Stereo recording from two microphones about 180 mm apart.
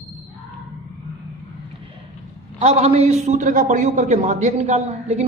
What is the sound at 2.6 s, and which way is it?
A man's voice, 35° right (ahead or behind).